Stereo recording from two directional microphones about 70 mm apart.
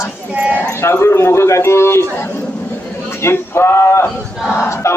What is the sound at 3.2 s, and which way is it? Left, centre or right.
Speech, left.